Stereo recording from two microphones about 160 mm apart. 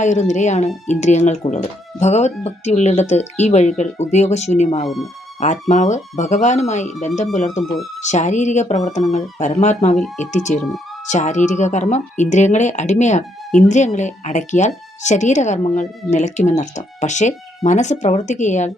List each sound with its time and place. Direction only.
0.0 s speech: 50° left (ahead or behind)
4.8 s speech: centre (ahead or behind)
5.4 s speech: 45° left (ahead or behind)